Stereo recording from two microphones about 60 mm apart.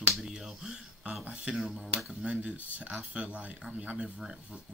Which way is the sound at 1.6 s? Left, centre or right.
Centre.